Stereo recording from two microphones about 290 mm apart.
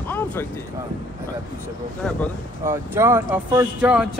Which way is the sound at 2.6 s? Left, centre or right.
Centre.